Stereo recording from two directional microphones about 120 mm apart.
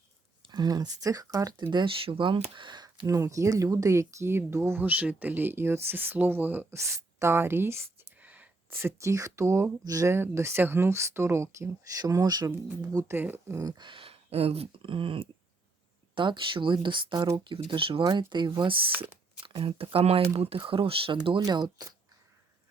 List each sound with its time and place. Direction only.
0.4 s speech: 35° right (ahead or behind)
1.7 s speech: 45° right (ahead or behind)
12.5 s speech: 15° right (ahead or behind)
12.9 s speech: 30° right (ahead or behind)
13.1 s speech: 15° right (ahead or behind)
13.7 s speech: 40° right (ahead or behind)
21.4 s speech: 35° right (ahead or behind)